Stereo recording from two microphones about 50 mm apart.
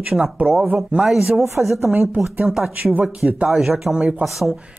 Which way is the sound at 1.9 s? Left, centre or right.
Right.